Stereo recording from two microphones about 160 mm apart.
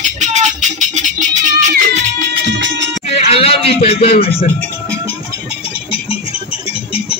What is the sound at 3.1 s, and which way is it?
Music, 40° left (ahead or behind).